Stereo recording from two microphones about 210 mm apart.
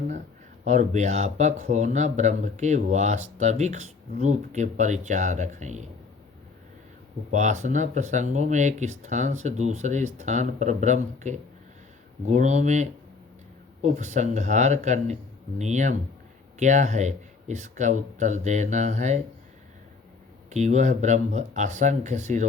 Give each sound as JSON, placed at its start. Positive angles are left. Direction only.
{"t": 0.6, "sound": "speech", "side_deg": -35}
{"t": 7.3, "sound": "speech", "side_deg": -35}
{"t": 20.5, "sound": "speech", "side_deg": -35}